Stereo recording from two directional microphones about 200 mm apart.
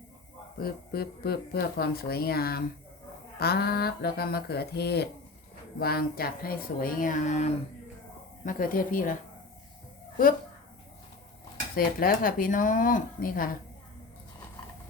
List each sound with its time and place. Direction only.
0.6 s speech: 50° left (ahead or behind)
11.9 s speech: 45° left (ahead or behind)